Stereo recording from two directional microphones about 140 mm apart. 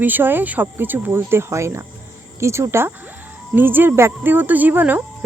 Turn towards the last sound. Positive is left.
turn(degrees=-10)  # may be behind; listen again after turning